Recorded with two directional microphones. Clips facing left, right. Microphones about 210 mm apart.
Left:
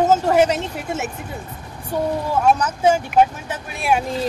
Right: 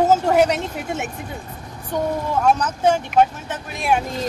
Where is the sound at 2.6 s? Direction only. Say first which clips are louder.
Left 1 dB; 10° left (ahead or behind).